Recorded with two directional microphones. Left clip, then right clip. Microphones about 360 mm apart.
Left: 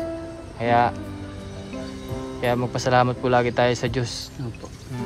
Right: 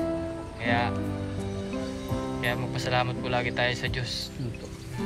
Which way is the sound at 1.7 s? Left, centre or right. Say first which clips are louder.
Left 2 dB; centre.